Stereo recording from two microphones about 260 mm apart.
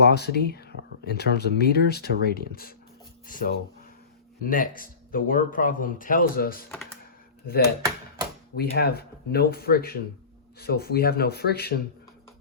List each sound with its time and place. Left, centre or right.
0.0 s speech: left
7.8 s a sound: centre
8.5 s speech: left